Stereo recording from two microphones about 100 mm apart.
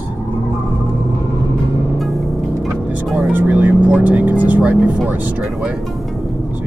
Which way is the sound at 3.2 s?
15° right (ahead or behind).